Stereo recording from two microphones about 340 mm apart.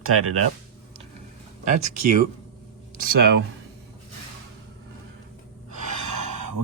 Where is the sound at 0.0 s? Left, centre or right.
Right.